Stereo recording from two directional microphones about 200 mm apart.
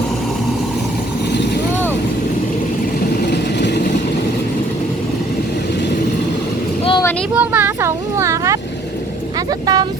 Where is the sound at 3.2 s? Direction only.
55° left (ahead or behind).